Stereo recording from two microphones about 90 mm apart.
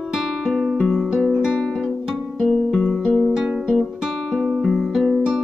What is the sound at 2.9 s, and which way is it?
Music, 5° right (ahead or behind).